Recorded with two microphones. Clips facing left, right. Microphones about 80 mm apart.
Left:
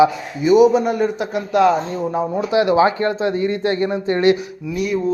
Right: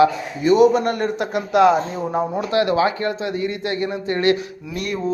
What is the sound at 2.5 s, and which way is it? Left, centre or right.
Speech, left.